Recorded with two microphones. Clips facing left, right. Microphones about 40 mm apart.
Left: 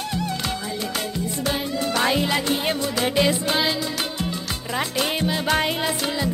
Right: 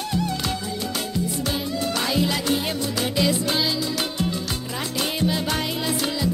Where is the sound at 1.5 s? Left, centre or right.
Left.